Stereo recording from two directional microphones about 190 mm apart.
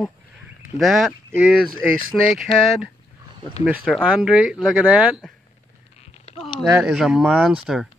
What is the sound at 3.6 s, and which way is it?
Speech, 10° right (ahead or behind).